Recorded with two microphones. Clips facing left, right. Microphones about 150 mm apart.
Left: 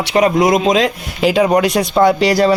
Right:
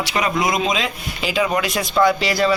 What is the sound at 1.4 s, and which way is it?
Speech, 40° left (ahead or behind).